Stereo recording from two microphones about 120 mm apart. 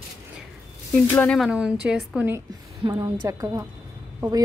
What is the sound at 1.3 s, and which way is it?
Speech, 5° right (ahead or behind).